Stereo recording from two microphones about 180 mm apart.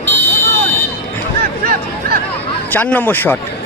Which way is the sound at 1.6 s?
55° right (ahead or behind).